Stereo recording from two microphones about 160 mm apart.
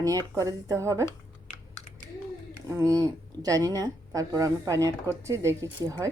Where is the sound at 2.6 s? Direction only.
20° right (ahead or behind).